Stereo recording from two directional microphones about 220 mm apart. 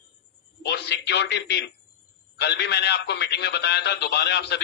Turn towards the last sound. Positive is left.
turn(degrees=50)  # may be behind; listen again after turning